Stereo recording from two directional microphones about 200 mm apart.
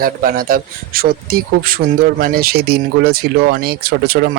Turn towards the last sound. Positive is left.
turn(degrees=-50)  # may be behind; listen again after turning